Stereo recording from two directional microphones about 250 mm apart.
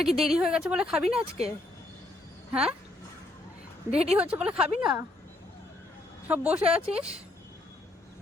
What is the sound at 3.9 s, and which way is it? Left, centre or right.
Speech, right.